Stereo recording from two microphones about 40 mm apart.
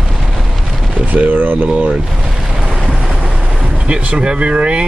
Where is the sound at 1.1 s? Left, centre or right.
Right.